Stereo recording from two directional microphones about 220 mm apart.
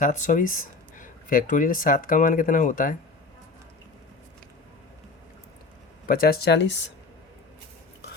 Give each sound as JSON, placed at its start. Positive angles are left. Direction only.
{"t": 0.0, "sound": "speech", "side_deg": 35}
{"t": 6.1, "sound": "speech", "side_deg": 40}